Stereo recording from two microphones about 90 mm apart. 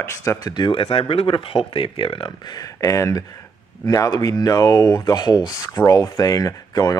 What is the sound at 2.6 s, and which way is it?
Speech, 40° left (ahead or behind).